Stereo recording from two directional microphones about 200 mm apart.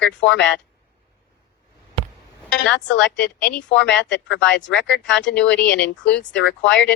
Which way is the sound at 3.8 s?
65° left (ahead or behind).